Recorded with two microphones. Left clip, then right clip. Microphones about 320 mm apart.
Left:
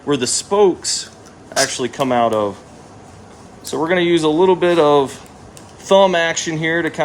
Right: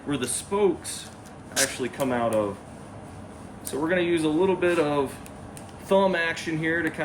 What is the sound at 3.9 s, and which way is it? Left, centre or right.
Speech, centre.